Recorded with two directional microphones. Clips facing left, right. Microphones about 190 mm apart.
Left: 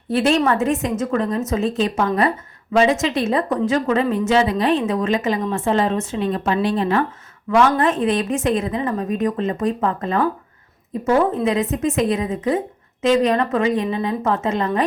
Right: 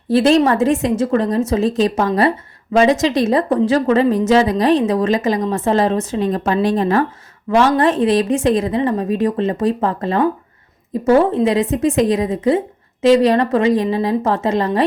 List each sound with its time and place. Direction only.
0.1 s a woman's voice: 35° right (ahead or behind)